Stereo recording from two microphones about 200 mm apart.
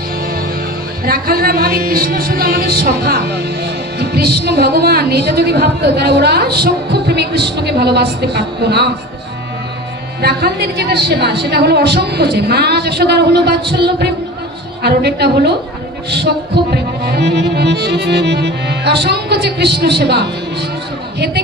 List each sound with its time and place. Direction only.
1.0 s speech: 50° right (ahead or behind)
10.2 s music: 55° right (ahead or behind)